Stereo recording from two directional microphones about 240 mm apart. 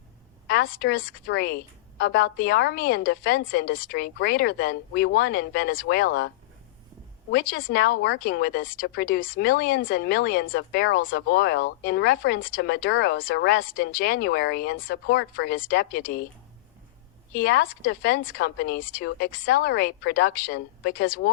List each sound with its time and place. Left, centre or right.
0.4 s speech: left
17.3 s speech: left